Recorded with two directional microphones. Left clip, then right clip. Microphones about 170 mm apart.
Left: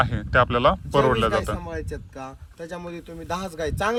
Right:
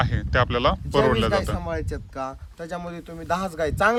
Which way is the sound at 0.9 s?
Centre (ahead or behind).